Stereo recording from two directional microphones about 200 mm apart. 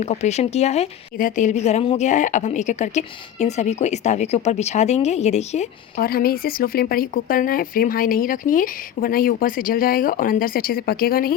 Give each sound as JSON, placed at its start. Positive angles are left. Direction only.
{"t": 0.0, "sound": "speech", "side_deg": 35}
{"t": 6.0, "sound": "speech", "side_deg": 50}